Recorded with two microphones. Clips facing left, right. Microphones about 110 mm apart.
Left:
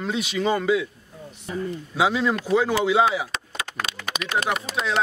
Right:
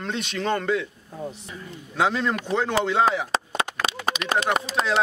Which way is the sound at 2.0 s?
5° left (ahead or behind).